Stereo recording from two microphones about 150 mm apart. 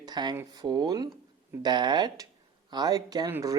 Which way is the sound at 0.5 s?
25° right (ahead or behind).